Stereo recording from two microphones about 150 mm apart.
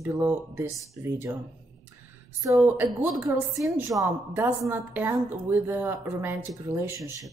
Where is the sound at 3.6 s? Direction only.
25° right (ahead or behind).